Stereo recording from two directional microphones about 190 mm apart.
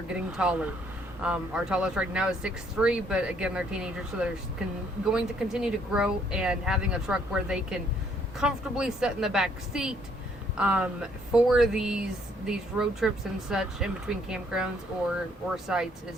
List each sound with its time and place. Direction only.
0.1 s speech: 5° right (ahead or behind)